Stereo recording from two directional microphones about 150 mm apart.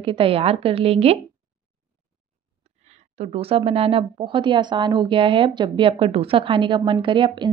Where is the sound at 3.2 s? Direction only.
40° right (ahead or behind).